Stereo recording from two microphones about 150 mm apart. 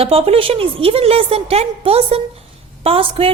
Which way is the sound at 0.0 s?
40° right (ahead or behind).